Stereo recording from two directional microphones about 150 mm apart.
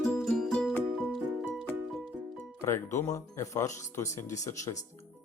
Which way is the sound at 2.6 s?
20° left (ahead or behind).